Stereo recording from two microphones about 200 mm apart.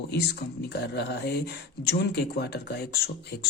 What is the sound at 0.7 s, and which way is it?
Speech, 55° left (ahead or behind).